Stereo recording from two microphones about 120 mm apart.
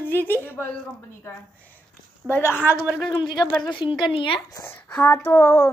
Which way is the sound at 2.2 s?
15° left (ahead or behind).